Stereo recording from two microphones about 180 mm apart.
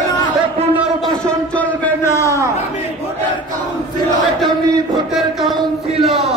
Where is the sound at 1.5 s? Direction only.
10° left (ahead or behind).